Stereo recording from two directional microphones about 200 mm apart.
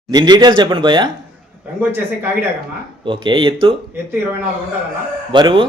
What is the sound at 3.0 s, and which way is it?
Speech, 25° right (ahead or behind).